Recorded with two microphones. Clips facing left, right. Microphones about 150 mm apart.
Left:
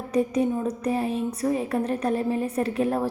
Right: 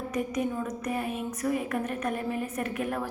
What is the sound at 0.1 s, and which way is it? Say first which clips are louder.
Speech: left 8 dB; 30° left (ahead or behind).